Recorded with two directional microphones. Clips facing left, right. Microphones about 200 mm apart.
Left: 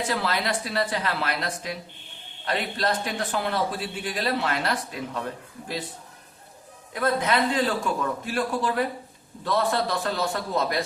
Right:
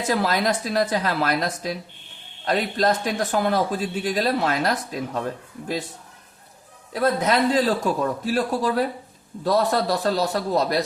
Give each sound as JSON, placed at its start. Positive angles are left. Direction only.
{"t": 0.1, "sound": "speech", "side_deg": -45}
{"t": 7.0, "sound": "a man's voice", "side_deg": -40}